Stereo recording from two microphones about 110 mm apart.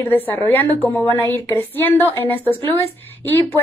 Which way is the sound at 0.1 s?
15° left (ahead or behind).